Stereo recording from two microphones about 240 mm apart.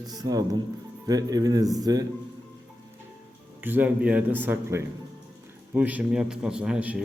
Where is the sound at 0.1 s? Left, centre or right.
Centre.